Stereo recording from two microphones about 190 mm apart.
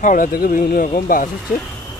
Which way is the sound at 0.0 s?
45° left (ahead or behind).